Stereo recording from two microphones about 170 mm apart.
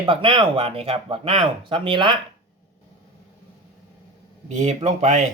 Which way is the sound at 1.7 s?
30° right (ahead or behind).